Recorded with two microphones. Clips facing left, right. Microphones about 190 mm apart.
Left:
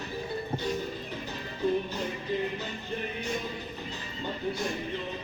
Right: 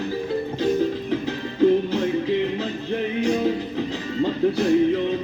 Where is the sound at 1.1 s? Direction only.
90° right.